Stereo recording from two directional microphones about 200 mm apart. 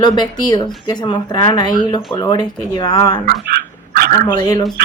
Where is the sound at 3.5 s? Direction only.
50° right (ahead or behind).